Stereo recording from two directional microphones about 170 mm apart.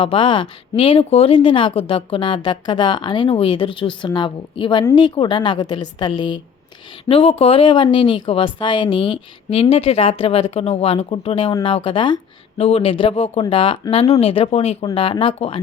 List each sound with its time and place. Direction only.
0.0 s speech: 30° left (ahead or behind)